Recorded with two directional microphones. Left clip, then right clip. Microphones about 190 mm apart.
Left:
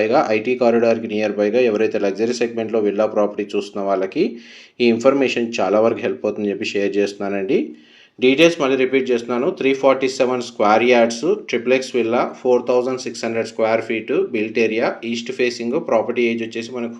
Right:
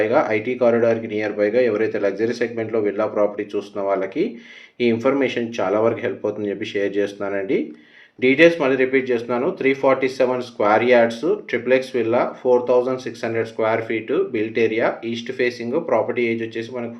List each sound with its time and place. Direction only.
0.0 s speech: 35° left (ahead or behind)